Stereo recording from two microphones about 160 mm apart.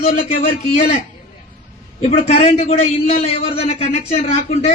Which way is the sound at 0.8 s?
40° left (ahead or behind).